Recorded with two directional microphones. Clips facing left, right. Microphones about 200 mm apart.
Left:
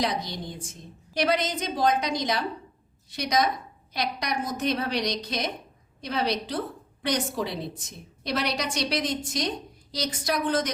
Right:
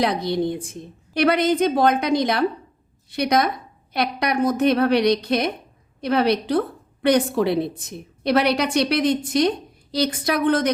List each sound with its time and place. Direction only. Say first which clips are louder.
0.0 s a woman's voice: right 8 dB; 60° right (ahead or behind)